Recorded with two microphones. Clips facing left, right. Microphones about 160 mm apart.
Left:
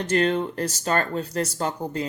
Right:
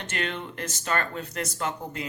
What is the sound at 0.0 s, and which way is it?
Speech, 35° left (ahead or behind).